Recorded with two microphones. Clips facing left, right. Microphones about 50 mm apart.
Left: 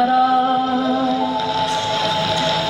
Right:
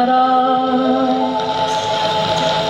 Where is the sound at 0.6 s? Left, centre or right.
Right.